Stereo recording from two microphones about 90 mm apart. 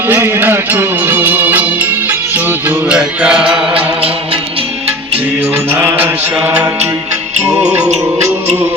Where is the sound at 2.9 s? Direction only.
10° right (ahead or behind).